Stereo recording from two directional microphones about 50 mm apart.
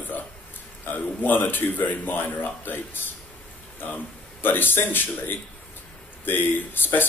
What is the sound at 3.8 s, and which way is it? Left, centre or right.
A man's voice, left.